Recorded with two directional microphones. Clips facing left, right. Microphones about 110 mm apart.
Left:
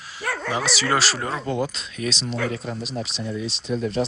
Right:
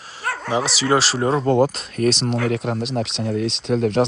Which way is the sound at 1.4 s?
50° right (ahead or behind).